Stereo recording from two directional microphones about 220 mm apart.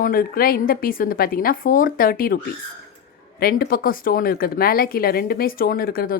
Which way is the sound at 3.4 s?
40° left (ahead or behind).